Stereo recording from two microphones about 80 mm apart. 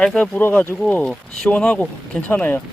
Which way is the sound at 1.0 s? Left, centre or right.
Centre.